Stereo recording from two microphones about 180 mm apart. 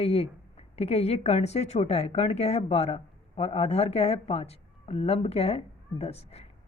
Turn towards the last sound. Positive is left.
turn(degrees=35)  # may be behind; listen again after turning